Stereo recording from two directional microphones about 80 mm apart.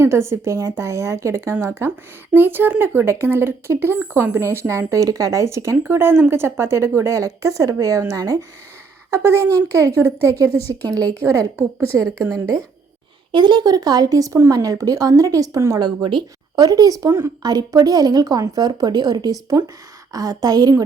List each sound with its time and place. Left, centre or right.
0.0 s a woman's voice: right
13.3 s a woman's voice: right
15.8 s speech: right
16.6 s a woman's voice: right
17.1 s speech: right
17.4 s a woman's voice: right